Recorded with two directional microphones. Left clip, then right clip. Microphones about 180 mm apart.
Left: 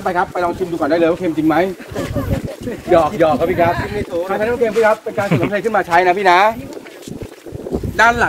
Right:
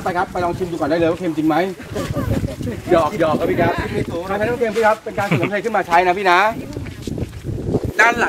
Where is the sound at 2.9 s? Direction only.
15° left (ahead or behind).